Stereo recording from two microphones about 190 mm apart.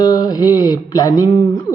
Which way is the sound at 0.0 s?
20° left (ahead or behind).